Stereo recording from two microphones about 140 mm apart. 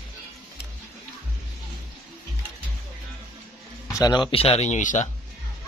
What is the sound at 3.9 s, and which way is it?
Speech, 25° left (ahead or behind).